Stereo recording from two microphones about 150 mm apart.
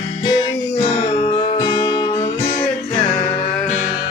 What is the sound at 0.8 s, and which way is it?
Music, 30° left (ahead or behind).